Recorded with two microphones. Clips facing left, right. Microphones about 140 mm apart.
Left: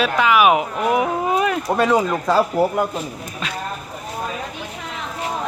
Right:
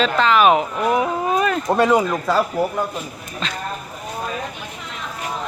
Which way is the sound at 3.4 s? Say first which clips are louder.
Right 1 dB; 10° left (ahead or behind).